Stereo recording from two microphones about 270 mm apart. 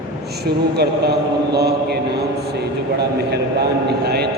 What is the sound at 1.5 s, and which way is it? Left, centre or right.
Speech, right.